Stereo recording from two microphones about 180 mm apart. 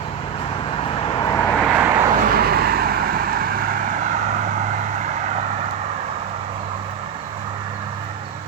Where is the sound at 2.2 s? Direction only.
55° right (ahead or behind); by 6.2 s 35° right (ahead or behind).